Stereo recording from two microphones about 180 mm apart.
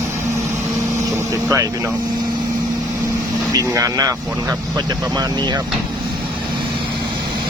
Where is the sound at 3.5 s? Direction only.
20° right (ahead or behind).